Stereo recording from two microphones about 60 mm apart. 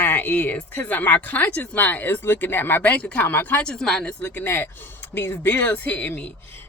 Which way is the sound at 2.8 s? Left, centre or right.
Left.